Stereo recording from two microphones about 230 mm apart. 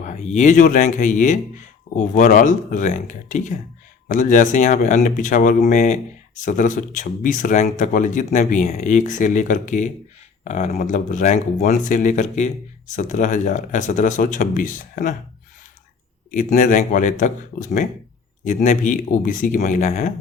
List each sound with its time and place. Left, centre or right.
0.0 s speech: left
16.3 s speech: left